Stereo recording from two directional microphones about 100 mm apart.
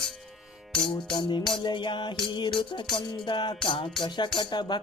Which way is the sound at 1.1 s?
50° left (ahead or behind).